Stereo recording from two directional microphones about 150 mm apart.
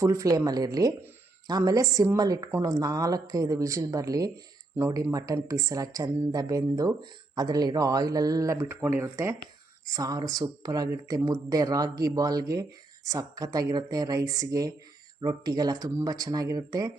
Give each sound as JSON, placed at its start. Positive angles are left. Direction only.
{"t": 0.0, "sound": "a woman's voice", "side_deg": -20}